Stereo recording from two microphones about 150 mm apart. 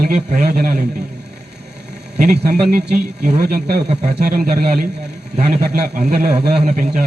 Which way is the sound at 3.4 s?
90° right.